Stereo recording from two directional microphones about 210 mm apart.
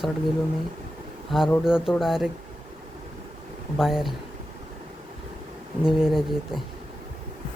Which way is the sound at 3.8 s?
Centre (ahead or behind).